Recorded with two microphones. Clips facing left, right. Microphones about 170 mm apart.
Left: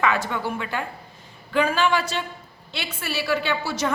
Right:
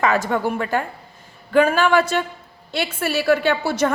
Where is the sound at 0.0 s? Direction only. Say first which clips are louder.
Right 4 dB; 45° right (ahead or behind).